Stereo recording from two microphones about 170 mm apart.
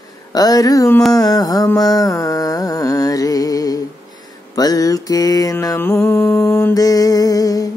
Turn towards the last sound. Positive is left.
turn(degrees=20)  # may be behind; listen again after turning